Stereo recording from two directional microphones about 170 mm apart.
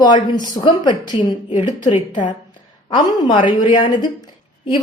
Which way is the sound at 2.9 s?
25° left (ahead or behind).